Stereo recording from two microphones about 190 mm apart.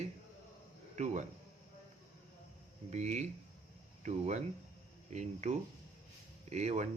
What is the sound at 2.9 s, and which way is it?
Speech, 35° right (ahead or behind).